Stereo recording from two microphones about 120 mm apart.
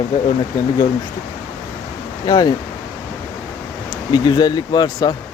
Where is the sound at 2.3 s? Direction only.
35° left (ahead or behind).